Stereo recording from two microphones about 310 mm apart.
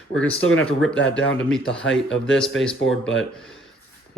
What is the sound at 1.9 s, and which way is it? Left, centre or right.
Speech, left.